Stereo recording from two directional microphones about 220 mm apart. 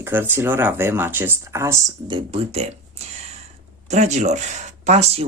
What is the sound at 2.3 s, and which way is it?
Speech, 25° right (ahead or behind).